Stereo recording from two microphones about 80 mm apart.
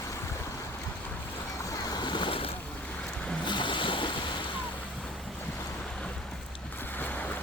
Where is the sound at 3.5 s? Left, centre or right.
Left.